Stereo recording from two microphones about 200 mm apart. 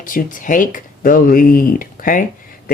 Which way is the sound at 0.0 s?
40° left (ahead or behind).